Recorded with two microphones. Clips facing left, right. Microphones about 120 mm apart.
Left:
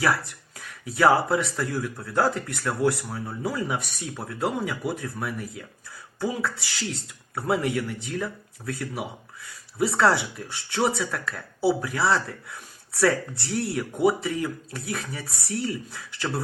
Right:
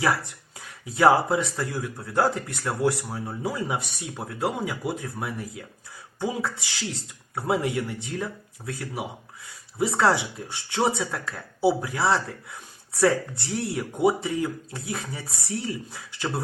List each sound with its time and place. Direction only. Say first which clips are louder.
0.9 s speech: right 1 dB; 25° right (ahead or behind)
13.4 s speech: left 1 dB; 20° right (ahead or behind)